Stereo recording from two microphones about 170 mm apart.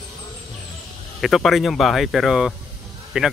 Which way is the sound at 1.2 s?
Centre (ahead or behind).